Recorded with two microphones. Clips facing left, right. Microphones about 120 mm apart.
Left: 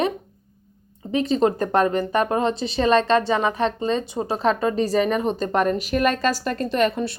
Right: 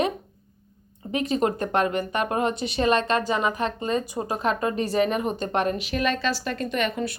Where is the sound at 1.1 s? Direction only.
30° left (ahead or behind).